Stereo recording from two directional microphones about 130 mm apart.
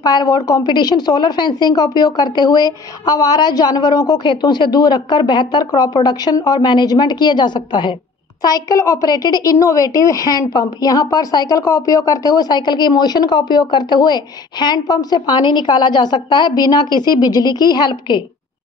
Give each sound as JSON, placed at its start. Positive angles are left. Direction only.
{"t": 0.0, "sound": "a woman's voice", "side_deg": 30}